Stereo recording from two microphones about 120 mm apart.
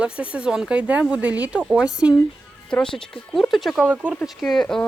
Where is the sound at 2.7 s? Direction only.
5° left (ahead or behind).